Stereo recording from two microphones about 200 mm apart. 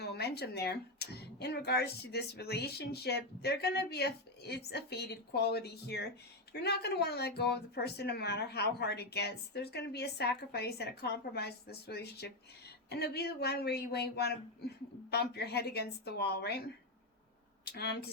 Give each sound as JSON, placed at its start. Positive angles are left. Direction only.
{"t": 0.0, "sound": "speech", "side_deg": 55}
{"t": 17.7, "sound": "speech", "side_deg": 55}